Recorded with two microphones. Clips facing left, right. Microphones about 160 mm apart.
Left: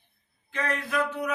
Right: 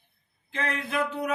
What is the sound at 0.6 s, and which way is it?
Speech, 25° right (ahead or behind).